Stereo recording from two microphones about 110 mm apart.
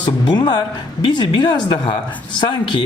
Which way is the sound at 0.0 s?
40° left (ahead or behind).